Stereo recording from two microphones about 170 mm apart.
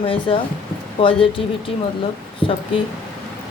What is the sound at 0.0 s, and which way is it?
Speech, 30° left (ahead or behind).